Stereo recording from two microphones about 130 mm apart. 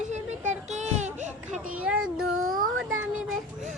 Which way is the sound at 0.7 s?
65° right (ahead or behind).